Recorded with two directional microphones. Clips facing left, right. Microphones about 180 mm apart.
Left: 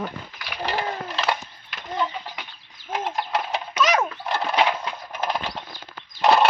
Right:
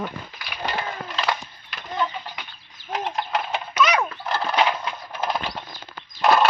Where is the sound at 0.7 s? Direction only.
30° left (ahead or behind).